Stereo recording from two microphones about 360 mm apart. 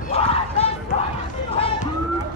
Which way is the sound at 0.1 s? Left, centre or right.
Centre.